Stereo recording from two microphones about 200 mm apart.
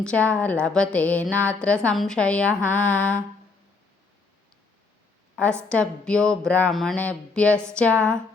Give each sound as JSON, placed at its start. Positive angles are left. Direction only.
{"t": 0.0, "sound": "a woman's voice", "side_deg": 5}
{"t": 2.6, "sound": "mantra", "side_deg": 5}
{"t": 5.6, "sound": "a woman's voice", "side_deg": 5}